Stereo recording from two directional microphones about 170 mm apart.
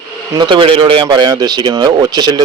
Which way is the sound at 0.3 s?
30° right (ahead or behind).